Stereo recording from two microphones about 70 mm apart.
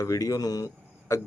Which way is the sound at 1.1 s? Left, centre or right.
Left.